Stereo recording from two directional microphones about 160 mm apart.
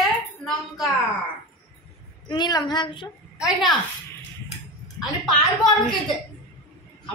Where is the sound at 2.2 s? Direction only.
25° left (ahead or behind).